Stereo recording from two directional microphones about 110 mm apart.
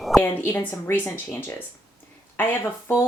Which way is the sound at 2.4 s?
20° left (ahead or behind).